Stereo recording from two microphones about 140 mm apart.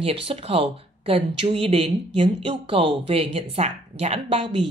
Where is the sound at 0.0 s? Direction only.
45° right (ahead or behind).